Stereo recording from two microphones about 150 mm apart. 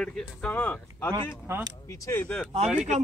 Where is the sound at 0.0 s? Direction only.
5° left (ahead or behind).